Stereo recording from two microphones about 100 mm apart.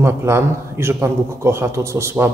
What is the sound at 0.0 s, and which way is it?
Speech, 25° right (ahead or behind).